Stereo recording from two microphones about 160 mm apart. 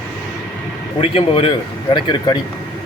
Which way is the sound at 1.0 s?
35° left (ahead or behind).